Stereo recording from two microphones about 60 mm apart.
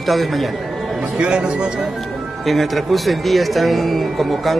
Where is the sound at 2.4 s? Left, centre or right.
Centre.